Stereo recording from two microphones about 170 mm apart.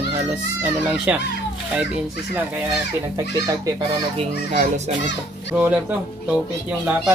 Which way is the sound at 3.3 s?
20° right (ahead or behind).